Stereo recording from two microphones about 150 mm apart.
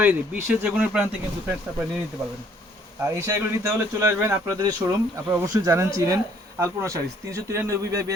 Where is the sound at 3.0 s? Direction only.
20° right (ahead or behind).